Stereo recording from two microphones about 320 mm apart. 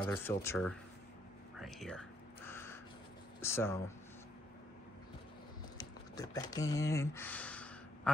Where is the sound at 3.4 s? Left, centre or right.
Centre.